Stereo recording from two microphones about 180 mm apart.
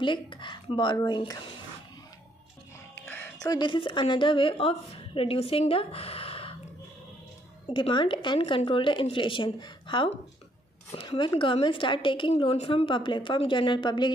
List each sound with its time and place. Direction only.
0.0 s a woman's voice: 25° left (ahead or behind)
3.1 s music: 10° left (ahead or behind)
3.5 s a woman's voice: 30° left (ahead or behind)
7.7 s a woman's voice: 25° left (ahead or behind)